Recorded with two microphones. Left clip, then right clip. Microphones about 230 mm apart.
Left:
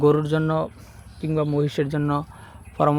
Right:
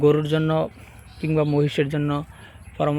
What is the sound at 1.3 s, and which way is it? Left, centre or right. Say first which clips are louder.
Speech: right 2 dB; centre.